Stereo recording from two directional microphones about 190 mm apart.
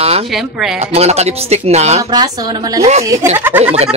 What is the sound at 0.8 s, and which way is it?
Speech, 35° right (ahead or behind).